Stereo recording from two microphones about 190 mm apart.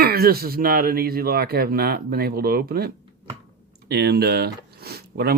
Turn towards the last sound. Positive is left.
turn(degrees=-55)  # may be behind; listen again after turning